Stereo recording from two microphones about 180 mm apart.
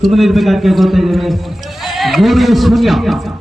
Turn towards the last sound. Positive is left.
turn(degrees=0)  # may be behind; listen again after turning